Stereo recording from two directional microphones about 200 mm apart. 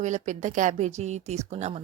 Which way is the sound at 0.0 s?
35° right (ahead or behind).